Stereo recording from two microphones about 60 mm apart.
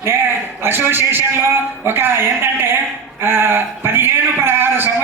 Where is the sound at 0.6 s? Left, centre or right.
Right.